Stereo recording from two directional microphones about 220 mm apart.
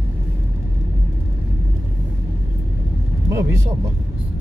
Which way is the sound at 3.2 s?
10° right (ahead or behind).